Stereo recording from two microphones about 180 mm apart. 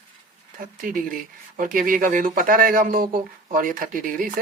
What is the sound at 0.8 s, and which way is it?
Speech, 50° right (ahead or behind).